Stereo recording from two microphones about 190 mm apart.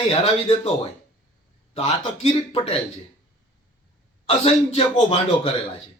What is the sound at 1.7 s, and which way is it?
A man's voice, 30° left (ahead or behind).